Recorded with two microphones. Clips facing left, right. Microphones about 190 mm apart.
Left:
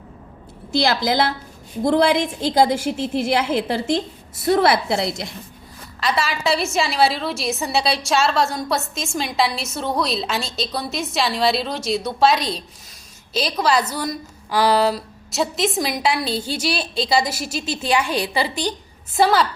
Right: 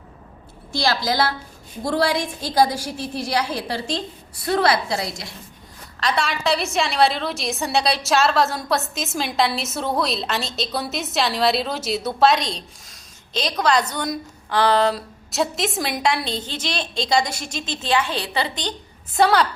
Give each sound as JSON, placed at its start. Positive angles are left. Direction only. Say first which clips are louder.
{"t": 0.8, "sound": "a woman's voice", "louder": "left 2 dB", "side_deg": 20}
{"t": 6.0, "sound": "a woman's voice", "louder": "left 1 dB", "side_deg": 5}